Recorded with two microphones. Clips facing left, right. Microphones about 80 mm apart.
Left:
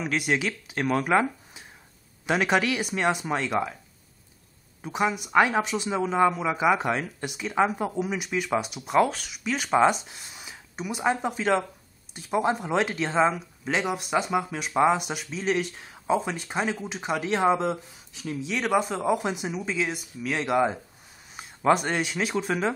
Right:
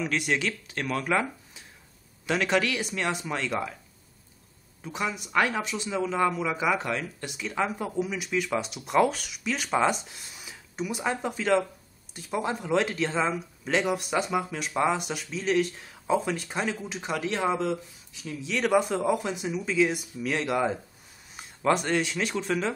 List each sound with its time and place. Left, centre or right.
0.1 s speech: centre
0.8 s speech: left
4.8 s speech: centre
8.2 s speech: centre
10.3 s a sound: centre
11.1 s speech: centre
13.7 s speech: centre
14.7 s speech: centre
18.5 s speech: centre
19.4 s speech: left
19.8 s speech: centre
21.4 s a sound: centre
21.8 s speech: centre